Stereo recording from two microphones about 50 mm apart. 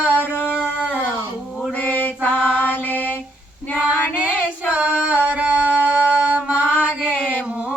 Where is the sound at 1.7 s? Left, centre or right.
Left.